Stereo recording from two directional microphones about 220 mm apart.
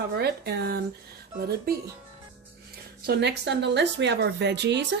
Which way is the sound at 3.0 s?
50° right (ahead or behind).